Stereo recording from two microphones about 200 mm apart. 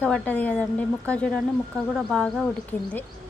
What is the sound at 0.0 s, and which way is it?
Speech, 5° left (ahead or behind).